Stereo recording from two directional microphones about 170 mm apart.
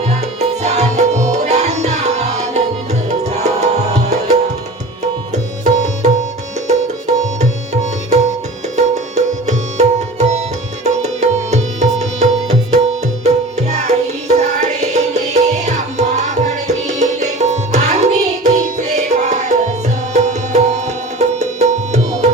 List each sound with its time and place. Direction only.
0.1 s music: 40° right (ahead or behind)
7.3 s music: 45° right (ahead or behind)